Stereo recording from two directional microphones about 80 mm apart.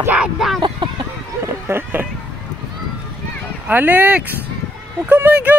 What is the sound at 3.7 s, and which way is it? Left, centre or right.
Speech, right.